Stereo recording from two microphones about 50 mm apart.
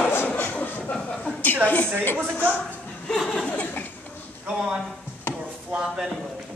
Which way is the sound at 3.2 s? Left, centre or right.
Centre.